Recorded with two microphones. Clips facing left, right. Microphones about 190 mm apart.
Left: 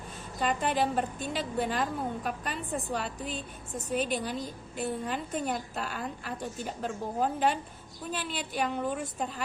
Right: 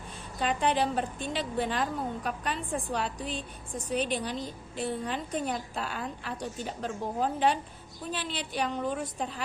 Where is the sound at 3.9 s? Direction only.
45° left (ahead or behind).